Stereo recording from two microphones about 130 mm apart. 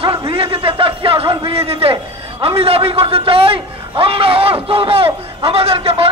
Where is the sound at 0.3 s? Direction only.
45° right (ahead or behind).